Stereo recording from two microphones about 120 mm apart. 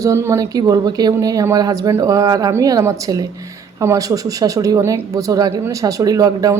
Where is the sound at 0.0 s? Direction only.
25° right (ahead or behind).